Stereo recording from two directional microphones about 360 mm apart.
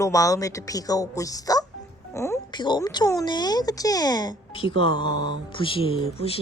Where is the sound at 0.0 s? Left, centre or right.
Centre.